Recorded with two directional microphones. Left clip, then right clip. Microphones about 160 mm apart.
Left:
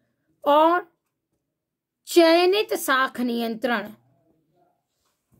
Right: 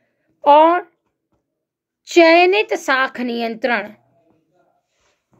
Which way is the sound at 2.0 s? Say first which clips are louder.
Right 6 dB; 45° left (ahead or behind).